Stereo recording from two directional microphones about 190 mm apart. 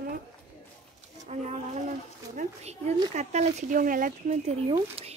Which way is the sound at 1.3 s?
35° right (ahead or behind).